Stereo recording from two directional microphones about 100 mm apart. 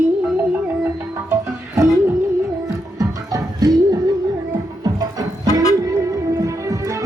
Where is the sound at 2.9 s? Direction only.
40° right (ahead or behind).